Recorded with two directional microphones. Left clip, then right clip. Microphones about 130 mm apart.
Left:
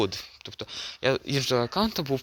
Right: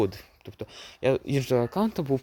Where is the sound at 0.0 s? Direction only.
25° right (ahead or behind).